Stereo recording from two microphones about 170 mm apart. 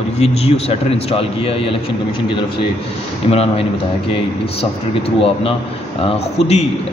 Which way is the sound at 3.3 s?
35° left (ahead or behind).